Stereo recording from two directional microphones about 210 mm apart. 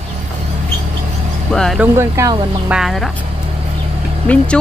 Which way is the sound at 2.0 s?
15° right (ahead or behind).